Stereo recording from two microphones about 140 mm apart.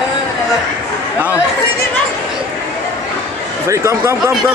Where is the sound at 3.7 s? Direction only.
20° right (ahead or behind).